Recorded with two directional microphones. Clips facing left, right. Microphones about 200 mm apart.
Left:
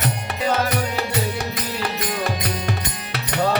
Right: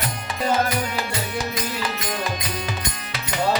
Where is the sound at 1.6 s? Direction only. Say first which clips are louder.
Left 1 dB; 60° left (ahead or behind).